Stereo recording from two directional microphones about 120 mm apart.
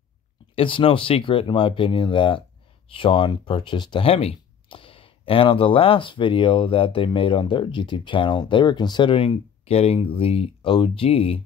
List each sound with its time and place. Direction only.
0.6 s speech: 45° left (ahead or behind)